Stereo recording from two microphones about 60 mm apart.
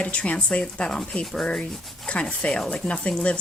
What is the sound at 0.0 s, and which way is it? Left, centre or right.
Speech, left.